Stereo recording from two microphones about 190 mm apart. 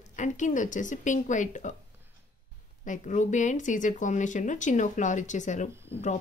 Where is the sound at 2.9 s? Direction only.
40° left (ahead or behind).